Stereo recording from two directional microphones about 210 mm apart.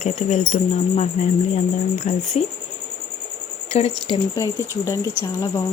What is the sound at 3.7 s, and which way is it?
Speech, 30° left (ahead or behind).